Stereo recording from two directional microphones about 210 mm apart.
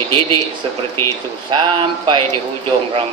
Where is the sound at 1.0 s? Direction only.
10° left (ahead or behind).